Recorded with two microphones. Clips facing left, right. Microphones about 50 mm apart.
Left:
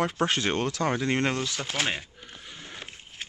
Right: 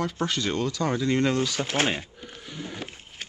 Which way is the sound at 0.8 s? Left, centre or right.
Left.